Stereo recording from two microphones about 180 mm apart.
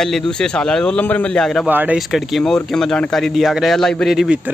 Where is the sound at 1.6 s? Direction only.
10° right (ahead or behind).